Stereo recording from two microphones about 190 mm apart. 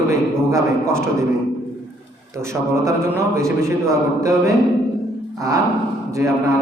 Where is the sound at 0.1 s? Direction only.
15° right (ahead or behind).